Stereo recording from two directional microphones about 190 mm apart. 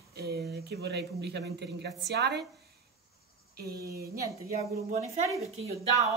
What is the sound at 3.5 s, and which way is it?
Speech, 55° right (ahead or behind).